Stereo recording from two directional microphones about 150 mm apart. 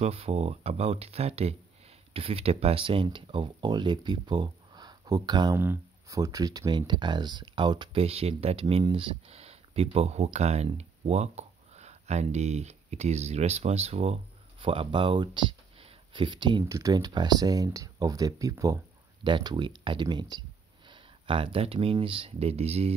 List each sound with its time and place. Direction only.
0.0 s speech: 40° right (ahead or behind)
5.6 s speech: 20° right (ahead or behind); by 22.9 s 45° right (ahead or behind)